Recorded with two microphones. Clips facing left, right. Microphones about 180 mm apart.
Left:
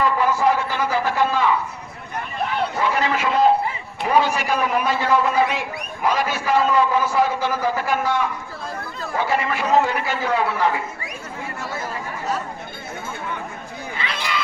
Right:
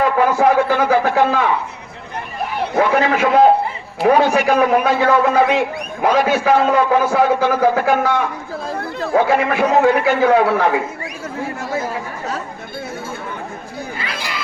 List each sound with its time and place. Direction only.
0.0 s a man's voice: 55° right (ahead or behind)
2.8 s a man's voice: 55° right (ahead or behind); by 10.8 s 80° right
14.0 s a sound: 10° right (ahead or behind)